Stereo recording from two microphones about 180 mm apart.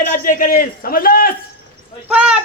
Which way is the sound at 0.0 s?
45° left (ahead or behind).